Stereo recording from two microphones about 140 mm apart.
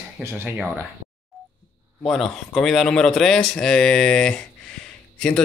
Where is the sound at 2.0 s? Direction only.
5° left (ahead or behind).